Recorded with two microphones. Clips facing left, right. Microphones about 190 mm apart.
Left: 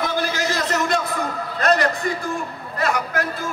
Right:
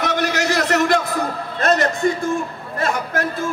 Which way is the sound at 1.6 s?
25° right (ahead or behind).